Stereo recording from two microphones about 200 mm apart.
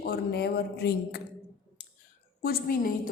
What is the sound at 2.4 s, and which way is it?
Speech, 45° left (ahead or behind).